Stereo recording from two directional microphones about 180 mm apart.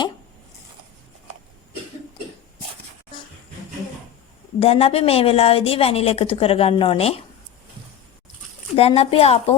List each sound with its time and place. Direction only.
4.6 s a woman's voice: 35° left (ahead or behind)
8.7 s a woman's voice: 35° left (ahead or behind)